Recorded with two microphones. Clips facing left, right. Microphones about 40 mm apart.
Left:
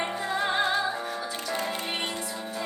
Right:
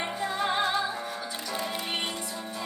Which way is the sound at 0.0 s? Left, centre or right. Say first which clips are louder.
Left 1 dB; centre.